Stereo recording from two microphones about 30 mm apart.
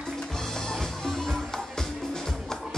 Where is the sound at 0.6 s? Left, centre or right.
Centre.